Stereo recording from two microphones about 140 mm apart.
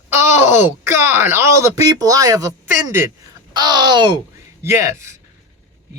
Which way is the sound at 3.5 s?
30° right (ahead or behind).